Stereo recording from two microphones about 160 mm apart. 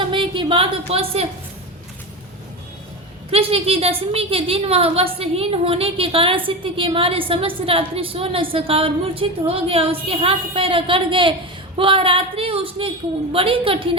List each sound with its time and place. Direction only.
0.0 s a woman's voice: 30° right (ahead or behind)
3.3 s a woman's voice: 35° right (ahead or behind)